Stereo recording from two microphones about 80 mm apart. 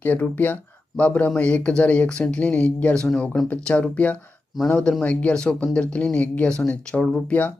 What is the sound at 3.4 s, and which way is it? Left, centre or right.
Speech, centre.